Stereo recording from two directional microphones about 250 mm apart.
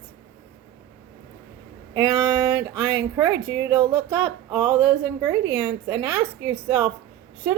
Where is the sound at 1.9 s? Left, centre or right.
Centre.